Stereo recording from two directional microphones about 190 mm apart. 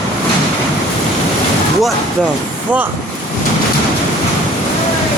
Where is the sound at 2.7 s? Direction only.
5° right (ahead or behind).